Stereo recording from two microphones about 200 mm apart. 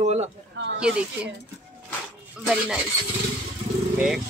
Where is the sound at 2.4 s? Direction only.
5° right (ahead or behind).